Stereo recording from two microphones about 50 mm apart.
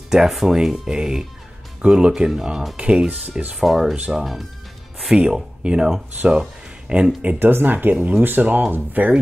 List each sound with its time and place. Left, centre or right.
0.1 s speech: centre
3.1 s speech: right
3.5 s speech: centre
6.9 s speech: right
7.3 s speech: right